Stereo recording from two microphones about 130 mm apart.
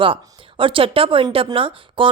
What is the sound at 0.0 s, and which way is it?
A woman's voice, 40° right (ahead or behind).